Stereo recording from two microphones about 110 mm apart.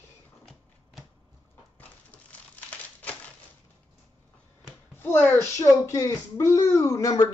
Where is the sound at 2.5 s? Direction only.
15° left (ahead or behind).